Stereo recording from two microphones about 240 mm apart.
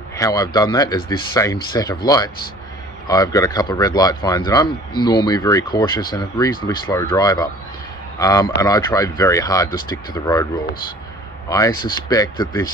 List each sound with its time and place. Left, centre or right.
0.2 s speech: centre